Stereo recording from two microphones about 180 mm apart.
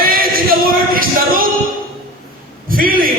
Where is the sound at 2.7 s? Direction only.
50° right (ahead or behind).